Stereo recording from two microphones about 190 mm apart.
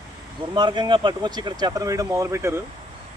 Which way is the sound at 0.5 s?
25° right (ahead or behind).